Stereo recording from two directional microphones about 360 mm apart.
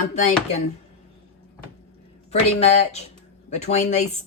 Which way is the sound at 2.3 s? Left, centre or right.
Centre.